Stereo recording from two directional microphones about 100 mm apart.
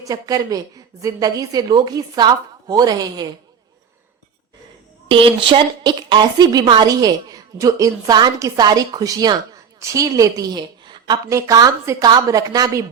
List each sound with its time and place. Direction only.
0.1 s a woman's voice: 35° right (ahead or behind)
5.0 s a woman's voice: 60° right (ahead or behind)
11.3 s a woman's voice: 30° right (ahead or behind)